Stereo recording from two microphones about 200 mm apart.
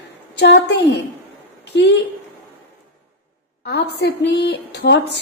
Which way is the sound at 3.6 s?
55° left (ahead or behind).